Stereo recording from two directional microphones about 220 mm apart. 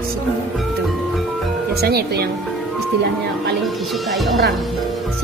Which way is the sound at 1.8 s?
45° right (ahead or behind).